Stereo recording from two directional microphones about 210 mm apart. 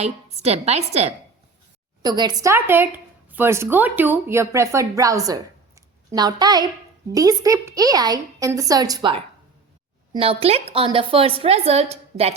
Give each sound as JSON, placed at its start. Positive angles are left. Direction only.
{"t": 0.0, "sound": "a woman's voice", "side_deg": -30}
{"t": 2.0, "sound": "a woman's voice", "side_deg": -20}